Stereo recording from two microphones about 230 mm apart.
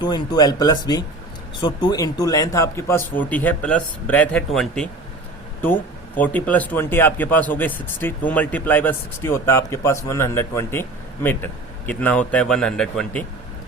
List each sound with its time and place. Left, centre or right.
0.0 s speech: centre